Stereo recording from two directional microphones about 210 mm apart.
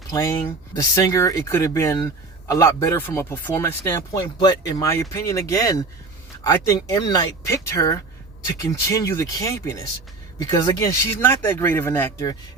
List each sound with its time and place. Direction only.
0.1 s speech: 15° left (ahead or behind)